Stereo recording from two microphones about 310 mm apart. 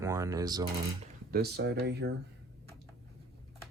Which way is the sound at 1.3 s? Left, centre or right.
Right.